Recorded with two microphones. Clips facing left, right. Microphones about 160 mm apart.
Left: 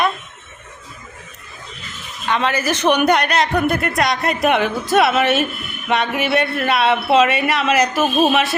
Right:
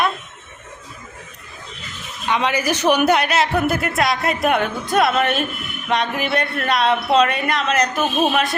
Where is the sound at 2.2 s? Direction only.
10° right (ahead or behind).